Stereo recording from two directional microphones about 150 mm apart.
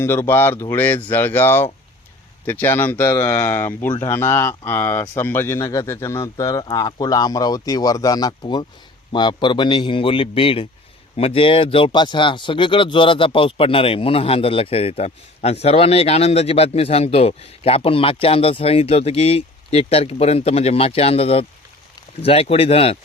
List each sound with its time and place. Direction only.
0.0 s a man's voice: 15° left (ahead or behind); by 23.0 s 40° left (ahead or behind)